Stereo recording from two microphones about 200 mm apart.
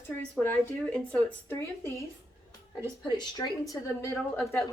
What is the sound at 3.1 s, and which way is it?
A woman's voice, 20° left (ahead or behind).